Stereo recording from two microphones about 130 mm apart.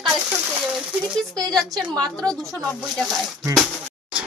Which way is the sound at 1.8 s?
30° right (ahead or behind).